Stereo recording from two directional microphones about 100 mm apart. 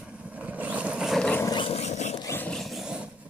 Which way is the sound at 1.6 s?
80° left.